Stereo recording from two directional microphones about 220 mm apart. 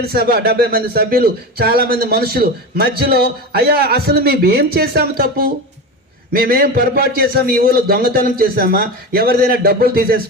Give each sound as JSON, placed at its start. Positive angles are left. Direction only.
{"t": 0.1, "sound": "speech", "side_deg": -45}